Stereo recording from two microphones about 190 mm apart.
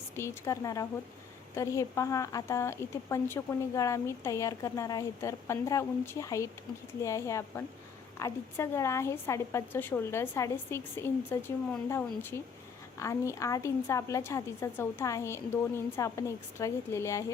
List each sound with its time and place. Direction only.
0.2 s a woman's voice: 15° left (ahead or behind)